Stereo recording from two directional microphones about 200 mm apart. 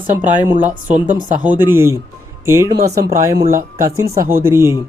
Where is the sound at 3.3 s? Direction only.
50° right (ahead or behind).